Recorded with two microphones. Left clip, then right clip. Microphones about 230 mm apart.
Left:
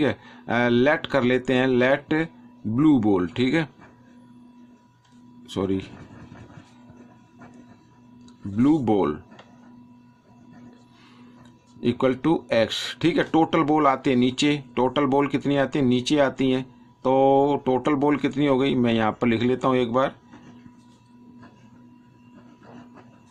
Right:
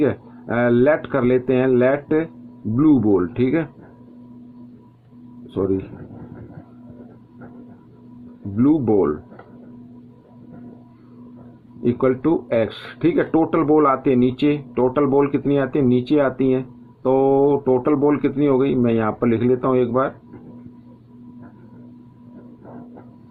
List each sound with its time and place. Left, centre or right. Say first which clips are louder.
0.0 s speech: right 4 dB; left
5.5 s speech: right 5 dB; left
8.5 s speech: right 4 dB; left
11.8 s speech: right 4 dB; left